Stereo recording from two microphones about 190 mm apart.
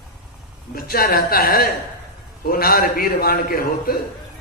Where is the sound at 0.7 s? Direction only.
50° left (ahead or behind).